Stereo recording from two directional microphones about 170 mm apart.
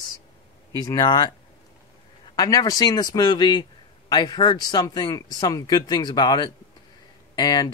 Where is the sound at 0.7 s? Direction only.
25° left (ahead or behind).